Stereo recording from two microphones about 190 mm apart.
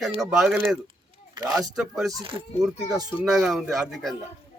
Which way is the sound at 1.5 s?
20° right (ahead or behind).